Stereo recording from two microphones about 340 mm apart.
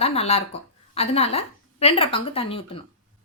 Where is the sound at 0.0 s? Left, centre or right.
Centre.